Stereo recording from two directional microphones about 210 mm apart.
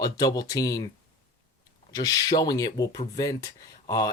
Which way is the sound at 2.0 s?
15° left (ahead or behind).